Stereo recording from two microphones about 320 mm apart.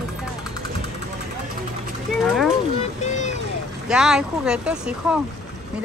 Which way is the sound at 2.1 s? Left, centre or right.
Centre.